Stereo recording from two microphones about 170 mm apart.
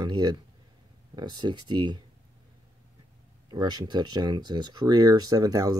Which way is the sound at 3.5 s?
25° right (ahead or behind).